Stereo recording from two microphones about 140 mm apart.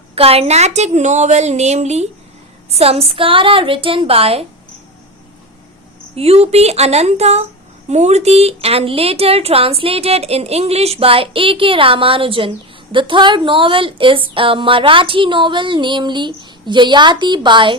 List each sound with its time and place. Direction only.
0.2 s a woman's voice: 45° right (ahead or behind)
6.1 s a woman's voice: 45° right (ahead or behind)